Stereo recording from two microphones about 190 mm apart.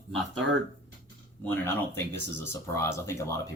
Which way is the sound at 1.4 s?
10° left (ahead or behind).